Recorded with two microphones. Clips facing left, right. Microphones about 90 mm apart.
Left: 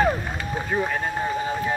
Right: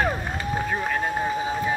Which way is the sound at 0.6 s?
Centre (ahead or behind).